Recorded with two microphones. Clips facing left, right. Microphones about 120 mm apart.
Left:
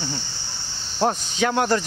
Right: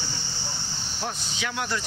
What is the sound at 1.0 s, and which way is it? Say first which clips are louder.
Speech: left 12 dB; 50° left (ahead or behind).